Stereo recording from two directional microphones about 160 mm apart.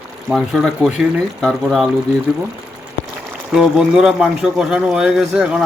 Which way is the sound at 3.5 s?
5° right (ahead or behind).